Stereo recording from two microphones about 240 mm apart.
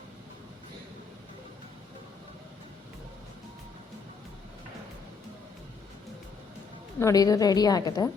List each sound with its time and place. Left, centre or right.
7.0 s a woman's voice: centre